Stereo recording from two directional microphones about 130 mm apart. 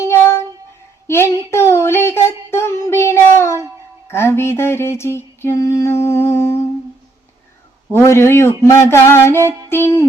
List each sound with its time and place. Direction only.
0.0 s a sound: 20° left (ahead or behind)
4.1 s mantra: 20° left (ahead or behind)
7.9 s mantra: 20° left (ahead or behind)
9.6 s music: 20° left (ahead or behind)